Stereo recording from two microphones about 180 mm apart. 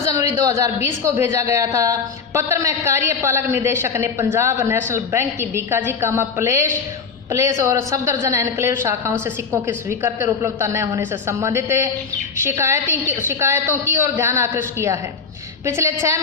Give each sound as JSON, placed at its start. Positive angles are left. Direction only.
{"t": 0.1, "sound": "a woman's voice", "side_deg": -20}